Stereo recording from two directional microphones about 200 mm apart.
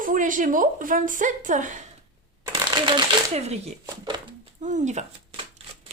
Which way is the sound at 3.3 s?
30° right (ahead or behind).